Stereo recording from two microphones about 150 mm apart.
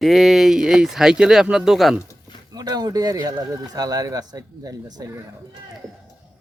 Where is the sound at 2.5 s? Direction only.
25° right (ahead or behind).